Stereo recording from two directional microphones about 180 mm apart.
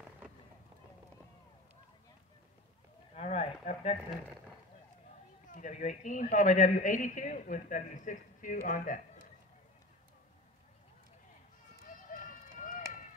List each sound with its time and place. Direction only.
3.2 s a sound: 35° left (ahead or behind)
5.5 s a woman's voice: 45° left (ahead or behind)
11.8 s run: 50° left (ahead or behind)